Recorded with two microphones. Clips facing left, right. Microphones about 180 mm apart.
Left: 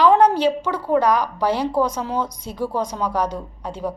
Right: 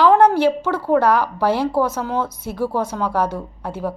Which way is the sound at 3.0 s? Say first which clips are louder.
Right 2 dB; 15° left (ahead or behind).